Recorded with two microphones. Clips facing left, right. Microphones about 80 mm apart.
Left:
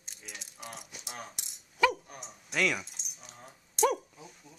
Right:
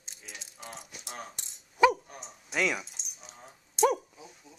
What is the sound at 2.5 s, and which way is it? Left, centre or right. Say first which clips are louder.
Speech: even; centre.